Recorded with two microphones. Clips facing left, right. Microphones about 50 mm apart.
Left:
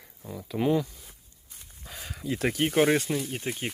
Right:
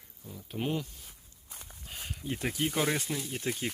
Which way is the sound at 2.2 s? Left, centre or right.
Left.